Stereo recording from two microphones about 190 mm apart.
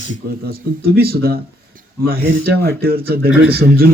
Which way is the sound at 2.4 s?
55° right (ahead or behind).